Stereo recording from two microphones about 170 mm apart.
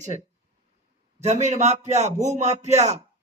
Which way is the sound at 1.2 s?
40° right (ahead or behind).